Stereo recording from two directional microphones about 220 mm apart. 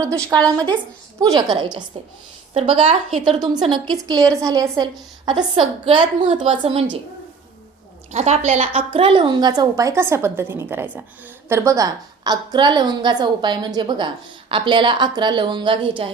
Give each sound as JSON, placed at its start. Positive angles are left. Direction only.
{"t": 0.3, "sound": "a woman's voice", "side_deg": -15}
{"t": 8.1, "sound": "a woman's voice", "side_deg": -30}